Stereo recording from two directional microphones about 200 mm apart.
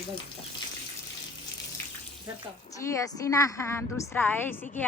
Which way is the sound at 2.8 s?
15° left (ahead or behind).